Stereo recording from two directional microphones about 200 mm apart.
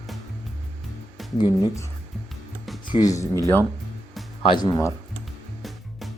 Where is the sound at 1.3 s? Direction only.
20° left (ahead or behind).